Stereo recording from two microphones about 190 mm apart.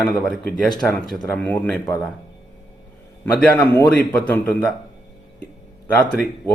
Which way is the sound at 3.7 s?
10° left (ahead or behind).